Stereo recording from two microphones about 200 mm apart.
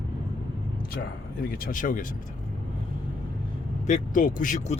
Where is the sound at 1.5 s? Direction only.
40° left (ahead or behind).